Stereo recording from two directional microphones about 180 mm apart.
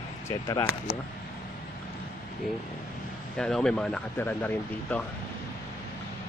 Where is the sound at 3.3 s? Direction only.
5° left (ahead or behind).